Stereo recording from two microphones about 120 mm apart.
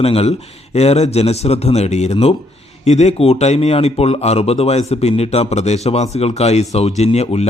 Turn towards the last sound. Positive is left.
turn(degrees=60)  # may be behind; listen again after turning